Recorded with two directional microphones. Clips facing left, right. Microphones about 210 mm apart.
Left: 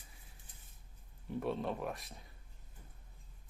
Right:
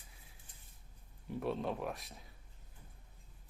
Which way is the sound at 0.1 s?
Centre (ahead or behind).